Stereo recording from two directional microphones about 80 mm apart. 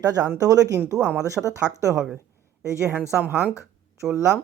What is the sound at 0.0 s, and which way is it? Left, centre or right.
Speech, right.